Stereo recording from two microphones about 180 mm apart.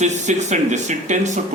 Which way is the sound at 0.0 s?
40° right (ahead or behind).